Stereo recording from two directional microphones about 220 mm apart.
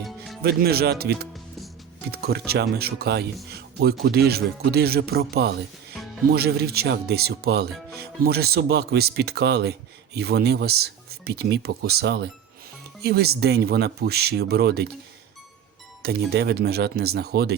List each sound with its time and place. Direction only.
0.4 s speech: 45° right (ahead or behind)
16.0 s speech: 45° right (ahead or behind)